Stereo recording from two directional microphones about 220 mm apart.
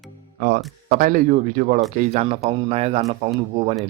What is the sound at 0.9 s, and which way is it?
Speech, 35° right (ahead or behind).